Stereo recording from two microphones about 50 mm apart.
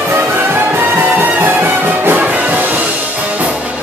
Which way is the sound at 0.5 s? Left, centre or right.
Right.